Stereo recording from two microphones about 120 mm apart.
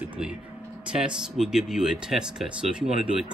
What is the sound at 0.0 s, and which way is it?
Vehicle, 10° right (ahead or behind).